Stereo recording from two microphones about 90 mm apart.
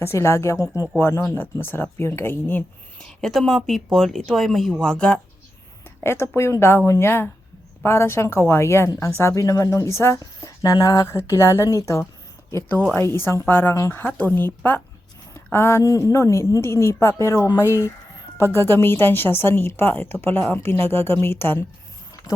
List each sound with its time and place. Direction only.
0.0 s a woman's voice: 30° left (ahead or behind)
3.0 s a woman's voice: 5° left (ahead or behind)
6.0 s a woman's voice: 30° left (ahead or behind)
13.0 s a woman's voice: 25° left (ahead or behind)
14.0 s a woman's voice: 20° left (ahead or behind)
18.5 s a woman's voice: 25° left (ahead or behind)